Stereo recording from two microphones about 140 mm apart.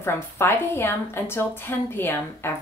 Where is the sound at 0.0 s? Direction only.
15° left (ahead or behind).